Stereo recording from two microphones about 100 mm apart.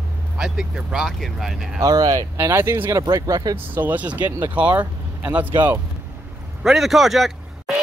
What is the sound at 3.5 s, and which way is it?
Speech, 20° right (ahead or behind).